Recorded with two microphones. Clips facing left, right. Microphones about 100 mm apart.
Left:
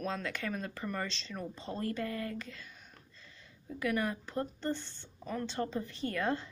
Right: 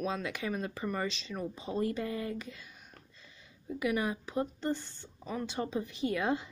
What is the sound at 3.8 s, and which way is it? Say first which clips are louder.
Speech: right 1 dB; 10° right (ahead or behind).